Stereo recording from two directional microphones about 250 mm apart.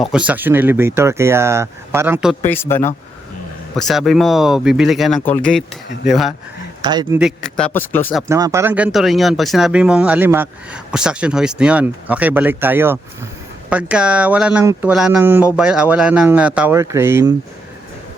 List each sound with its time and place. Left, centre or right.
0.0 s speech: centre
2.5 s speech: centre
6.8 s speech: centre
7.2 s speech: centre
8.3 s speech: centre